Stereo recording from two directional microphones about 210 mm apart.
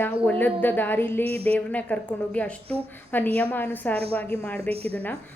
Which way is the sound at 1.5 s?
5° left (ahead or behind).